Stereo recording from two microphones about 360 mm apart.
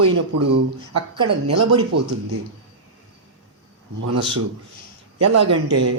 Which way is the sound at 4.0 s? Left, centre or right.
Right.